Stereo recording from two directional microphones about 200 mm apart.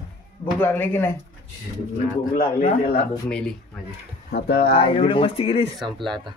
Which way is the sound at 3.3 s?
5° left (ahead or behind).